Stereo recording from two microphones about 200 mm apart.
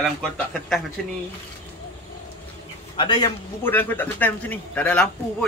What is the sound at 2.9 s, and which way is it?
Speech, 20° left (ahead or behind).